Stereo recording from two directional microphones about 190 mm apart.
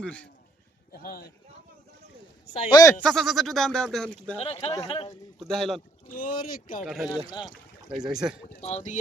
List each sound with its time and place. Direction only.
0.0 s speech: 5° left (ahead or behind)
0.9 s speech: 50° left (ahead or behind)
2.6 s speech: 20° left (ahead or behind)
3.0 s speech: centre (ahead or behind)
4.4 s speech: 30° left (ahead or behind)
5.4 s speech: centre (ahead or behind)
6.1 s speech: 45° left (ahead or behind)
6.8 s speech: centre (ahead or behind)
8.6 s speech: 35° left (ahead or behind)